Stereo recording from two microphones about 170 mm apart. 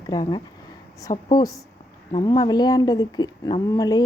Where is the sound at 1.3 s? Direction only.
25° left (ahead or behind).